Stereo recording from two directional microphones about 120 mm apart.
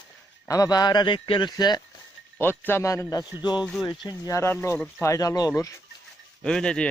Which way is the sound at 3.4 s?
35° left (ahead or behind).